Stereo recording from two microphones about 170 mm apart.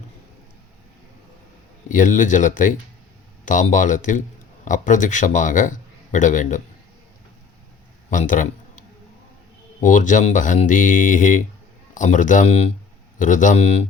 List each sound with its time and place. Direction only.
1.9 s a man's voice: 50° left (ahead or behind)
8.1 s a man's voice: 50° left (ahead or behind)
9.8 s a man's voice: 50° left (ahead or behind)